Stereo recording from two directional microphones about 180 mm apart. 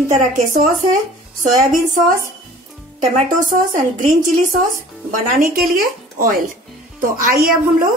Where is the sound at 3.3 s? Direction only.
45° right (ahead or behind).